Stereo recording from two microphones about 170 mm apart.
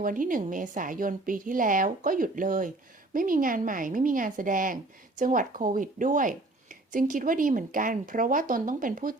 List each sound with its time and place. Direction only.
0.0 s a woman's voice: 55° right (ahead or behind)